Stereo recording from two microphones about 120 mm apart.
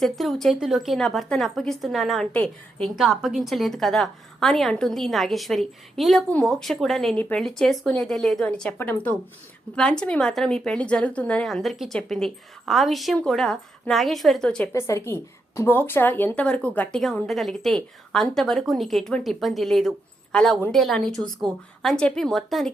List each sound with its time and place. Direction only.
0.0 s a woman's voice: centre (ahead or behind)
14.7 s a woman's voice: 25° left (ahead or behind)
17.2 s a woman's voice: centre (ahead or behind)